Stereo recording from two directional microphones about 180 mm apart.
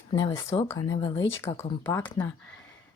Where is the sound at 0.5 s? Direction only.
25° left (ahead or behind).